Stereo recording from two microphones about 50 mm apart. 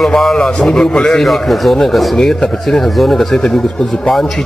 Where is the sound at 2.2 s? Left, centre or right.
Centre.